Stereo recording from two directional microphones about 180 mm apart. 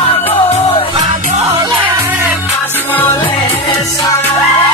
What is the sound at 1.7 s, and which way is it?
Music, 10° right (ahead or behind).